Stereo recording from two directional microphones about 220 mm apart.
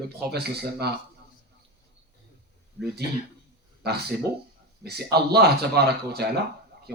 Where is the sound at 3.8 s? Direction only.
45° right (ahead or behind).